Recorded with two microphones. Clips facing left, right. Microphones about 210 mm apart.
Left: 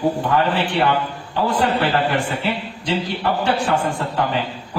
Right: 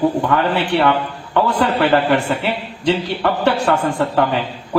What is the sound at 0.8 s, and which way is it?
A man's voice, 65° right (ahead or behind).